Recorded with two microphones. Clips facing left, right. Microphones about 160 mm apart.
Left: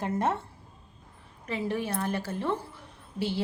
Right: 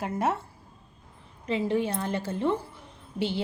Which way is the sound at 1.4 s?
20° right (ahead or behind).